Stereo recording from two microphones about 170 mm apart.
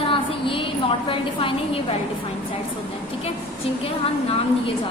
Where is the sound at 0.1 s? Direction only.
30° left (ahead or behind).